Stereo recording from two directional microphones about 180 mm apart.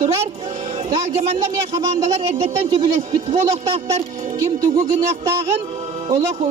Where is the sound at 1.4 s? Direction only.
20° right (ahead or behind).